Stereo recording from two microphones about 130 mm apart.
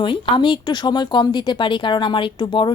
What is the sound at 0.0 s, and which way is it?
Speech, 40° left (ahead or behind).